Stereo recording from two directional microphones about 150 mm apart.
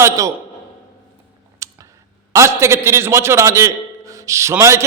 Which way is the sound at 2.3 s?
20° right (ahead or behind).